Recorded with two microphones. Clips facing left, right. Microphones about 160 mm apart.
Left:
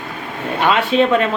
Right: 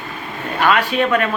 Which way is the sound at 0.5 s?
25° left (ahead or behind).